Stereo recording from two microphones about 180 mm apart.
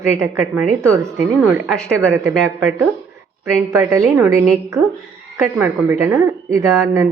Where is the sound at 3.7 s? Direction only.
15° right (ahead or behind).